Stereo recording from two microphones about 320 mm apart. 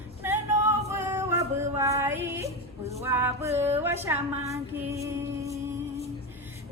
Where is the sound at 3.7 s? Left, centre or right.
Centre.